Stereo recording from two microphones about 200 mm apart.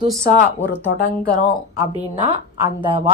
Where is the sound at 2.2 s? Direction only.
25° right (ahead or behind).